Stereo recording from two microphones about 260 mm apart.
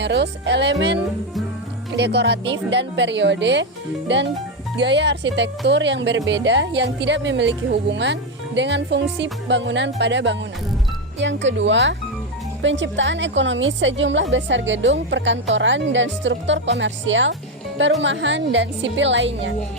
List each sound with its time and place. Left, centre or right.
0.0 s music: right
1.9 s speech: right